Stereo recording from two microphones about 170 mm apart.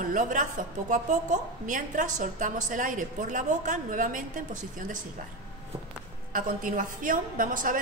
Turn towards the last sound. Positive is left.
turn(degrees=-50)  # may be behind; listen again after turning